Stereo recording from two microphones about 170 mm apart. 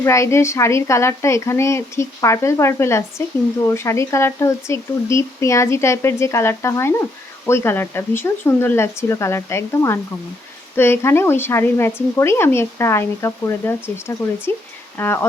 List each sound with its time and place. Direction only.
0.0 s speech: 15° left (ahead or behind)